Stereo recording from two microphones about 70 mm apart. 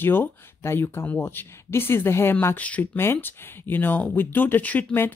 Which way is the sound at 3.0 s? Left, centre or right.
Left.